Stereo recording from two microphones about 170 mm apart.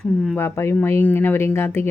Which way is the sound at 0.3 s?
15° left (ahead or behind).